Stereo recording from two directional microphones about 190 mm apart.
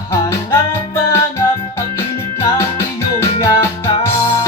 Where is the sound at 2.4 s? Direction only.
15° left (ahead or behind).